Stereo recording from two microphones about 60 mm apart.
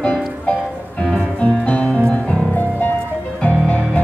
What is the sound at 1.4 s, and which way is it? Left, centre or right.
Music, centre.